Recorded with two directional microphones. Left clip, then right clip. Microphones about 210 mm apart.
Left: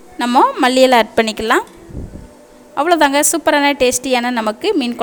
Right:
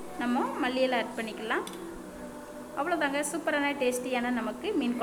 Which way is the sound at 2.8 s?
55° left (ahead or behind).